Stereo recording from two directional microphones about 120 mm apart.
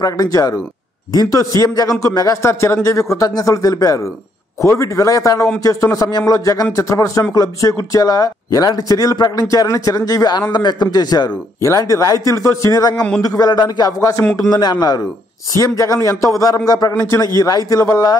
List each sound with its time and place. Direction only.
0.0 s a man's voice: 30° left (ahead or behind)
12.9 s speech: 10° left (ahead or behind)
13.2 s a man's voice: 30° left (ahead or behind)